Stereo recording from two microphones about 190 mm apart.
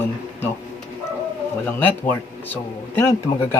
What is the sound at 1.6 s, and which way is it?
Speech, 10° left (ahead or behind).